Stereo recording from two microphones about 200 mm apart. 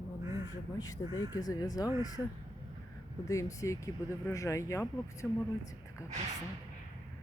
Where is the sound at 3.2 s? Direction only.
15° left (ahead or behind).